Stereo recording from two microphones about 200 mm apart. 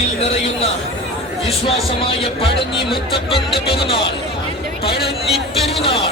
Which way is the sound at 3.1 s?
25° left (ahead or behind).